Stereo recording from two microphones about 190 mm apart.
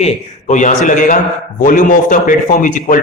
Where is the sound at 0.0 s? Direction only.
40° left (ahead or behind).